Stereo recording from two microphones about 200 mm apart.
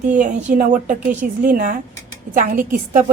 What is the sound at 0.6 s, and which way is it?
A woman's voice, 40° right (ahead or behind).